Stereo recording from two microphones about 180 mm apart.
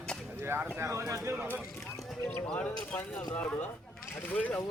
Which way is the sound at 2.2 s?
5° left (ahead or behind).